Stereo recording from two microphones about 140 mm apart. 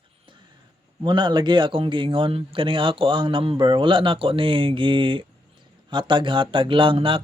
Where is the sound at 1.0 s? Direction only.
35° right (ahead or behind).